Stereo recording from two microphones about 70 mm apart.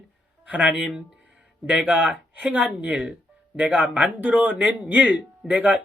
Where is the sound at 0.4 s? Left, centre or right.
Centre.